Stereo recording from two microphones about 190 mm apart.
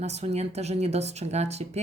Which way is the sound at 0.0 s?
35° right (ahead or behind).